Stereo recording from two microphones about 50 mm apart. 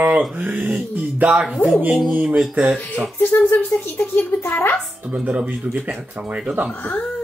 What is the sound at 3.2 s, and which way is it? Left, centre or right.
Speech, left.